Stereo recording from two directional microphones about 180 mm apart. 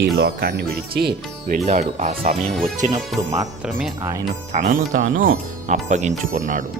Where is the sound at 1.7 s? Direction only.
40° right (ahead or behind).